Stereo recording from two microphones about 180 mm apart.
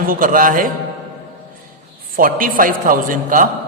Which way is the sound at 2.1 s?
50° right (ahead or behind).